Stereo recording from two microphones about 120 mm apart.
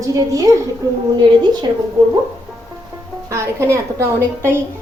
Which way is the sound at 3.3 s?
25° right (ahead or behind).